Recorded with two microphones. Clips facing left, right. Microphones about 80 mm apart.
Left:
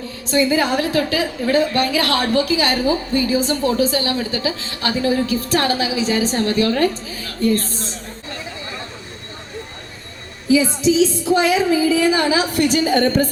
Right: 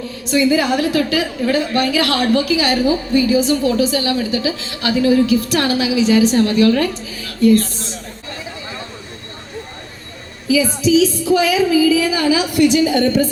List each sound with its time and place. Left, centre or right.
0.3 s a woman's voice: left
10.5 s a woman's voice: left